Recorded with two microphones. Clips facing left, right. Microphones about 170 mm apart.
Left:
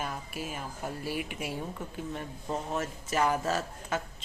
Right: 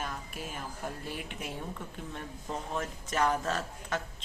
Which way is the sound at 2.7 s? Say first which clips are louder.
Left 1 dB; 5° left (ahead or behind).